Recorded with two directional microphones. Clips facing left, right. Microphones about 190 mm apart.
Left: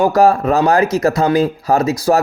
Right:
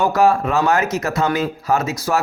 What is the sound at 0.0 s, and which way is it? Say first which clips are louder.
Speech: left 4 dB; 35° left (ahead or behind).